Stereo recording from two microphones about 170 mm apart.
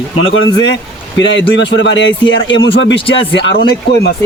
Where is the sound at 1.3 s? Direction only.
90° left.